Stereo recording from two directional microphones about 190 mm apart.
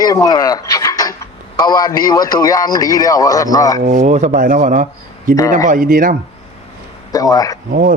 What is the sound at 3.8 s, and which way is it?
A man's voice, 35° right (ahead or behind).